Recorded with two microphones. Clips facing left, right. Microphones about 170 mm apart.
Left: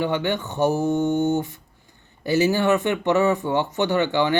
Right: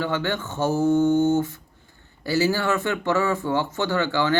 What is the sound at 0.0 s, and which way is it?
Speech, 15° left (ahead or behind).